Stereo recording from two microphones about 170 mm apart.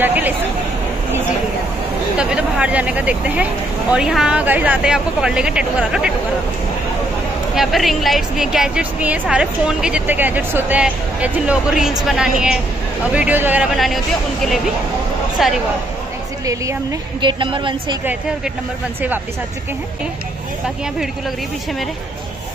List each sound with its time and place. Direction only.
0.0 s speech: 10° right (ahead or behind)
2.1 s a woman's voice: 5° right (ahead or behind)
7.5 s a woman's voice: centre (ahead or behind)
17.2 s a woman's voice: 30° right (ahead or behind)